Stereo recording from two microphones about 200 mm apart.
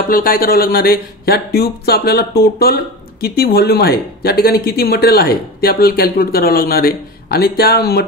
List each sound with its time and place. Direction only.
0.1 s speech: 45° left (ahead or behind)